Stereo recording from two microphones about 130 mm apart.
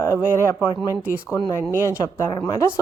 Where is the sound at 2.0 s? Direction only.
25° left (ahead or behind).